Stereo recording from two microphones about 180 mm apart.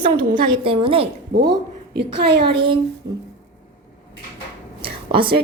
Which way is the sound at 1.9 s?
65° right (ahead or behind).